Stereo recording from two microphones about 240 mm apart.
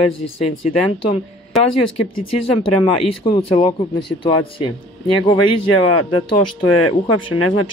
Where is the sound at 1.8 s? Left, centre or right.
Left.